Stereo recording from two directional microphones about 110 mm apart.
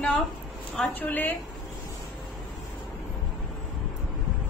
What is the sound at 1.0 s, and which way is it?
Speech, 15° left (ahead or behind).